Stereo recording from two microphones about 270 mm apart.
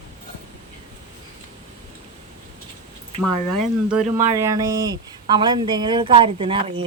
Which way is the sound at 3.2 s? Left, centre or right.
Centre.